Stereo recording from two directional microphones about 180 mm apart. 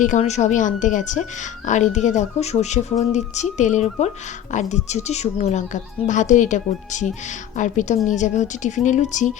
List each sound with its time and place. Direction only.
0.0 s a woman's voice: 40° left (ahead or behind)